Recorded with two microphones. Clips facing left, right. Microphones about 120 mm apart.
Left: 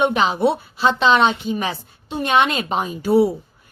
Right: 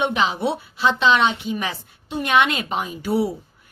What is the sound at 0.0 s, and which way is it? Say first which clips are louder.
A woman's voice: left 4 dB; 45° left (ahead or behind).